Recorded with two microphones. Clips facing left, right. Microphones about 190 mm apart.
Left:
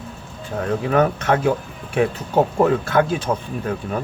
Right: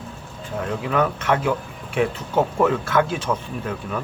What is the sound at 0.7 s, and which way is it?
Speech, 40° left (ahead or behind).